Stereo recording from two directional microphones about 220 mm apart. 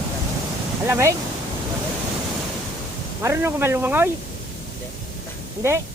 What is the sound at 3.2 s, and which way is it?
Speech, 10° right (ahead or behind).